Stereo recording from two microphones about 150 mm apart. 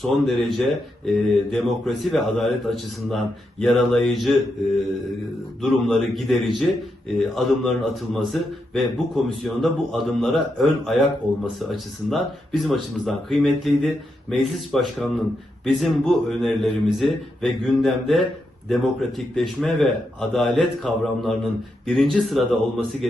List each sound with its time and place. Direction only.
0.0 s a man's voice: centre (ahead or behind)
5.6 s a man's voice: centre (ahead or behind)